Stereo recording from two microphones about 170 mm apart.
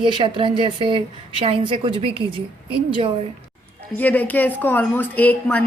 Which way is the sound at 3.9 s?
10° left (ahead or behind).